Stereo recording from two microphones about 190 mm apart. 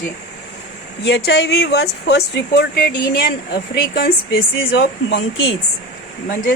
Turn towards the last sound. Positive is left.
turn(degrees=45)  # may be behind; listen again after turning